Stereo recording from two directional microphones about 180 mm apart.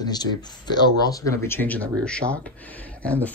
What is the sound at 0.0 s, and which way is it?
Speech, 20° left (ahead or behind).